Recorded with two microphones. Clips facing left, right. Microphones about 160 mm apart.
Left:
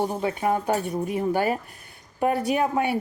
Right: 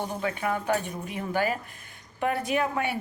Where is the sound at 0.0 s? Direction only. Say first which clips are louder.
Left 5 dB; 35° left (ahead or behind).